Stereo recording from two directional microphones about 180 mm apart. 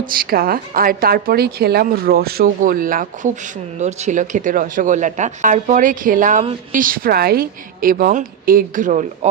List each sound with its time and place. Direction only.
0.0 s a woman's voice: 55° right (ahead or behind)